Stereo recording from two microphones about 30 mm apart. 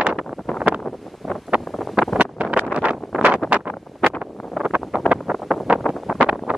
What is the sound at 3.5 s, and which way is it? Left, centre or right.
Wind noise, right.